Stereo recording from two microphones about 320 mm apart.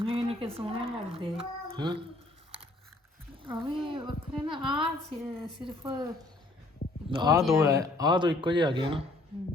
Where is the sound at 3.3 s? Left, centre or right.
Centre.